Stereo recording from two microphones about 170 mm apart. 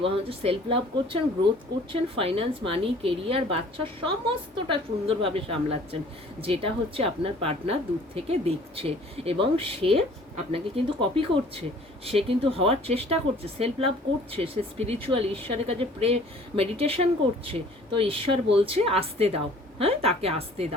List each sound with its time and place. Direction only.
0.0 s a woman's voice: 35° right (ahead or behind)